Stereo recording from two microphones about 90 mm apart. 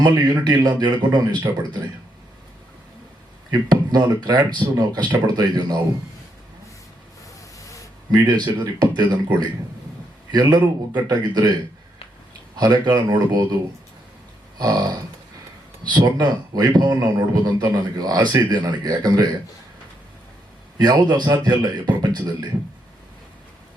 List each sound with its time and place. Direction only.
0.2 s a man's voice: 55° right (ahead or behind)
3.5 s a man's voice: 45° right (ahead or behind)
8.1 s a man's voice: 50° right (ahead or behind)
12.5 s a man's voice: 50° right (ahead or behind)
14.6 s a man's voice: 50° right (ahead or behind)
20.7 s a man's voice: 50° right (ahead or behind)